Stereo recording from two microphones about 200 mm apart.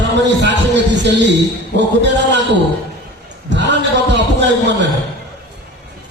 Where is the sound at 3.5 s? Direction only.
60° right (ahead or behind).